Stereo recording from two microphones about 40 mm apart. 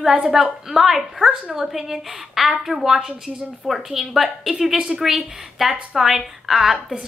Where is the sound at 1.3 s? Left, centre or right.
Centre.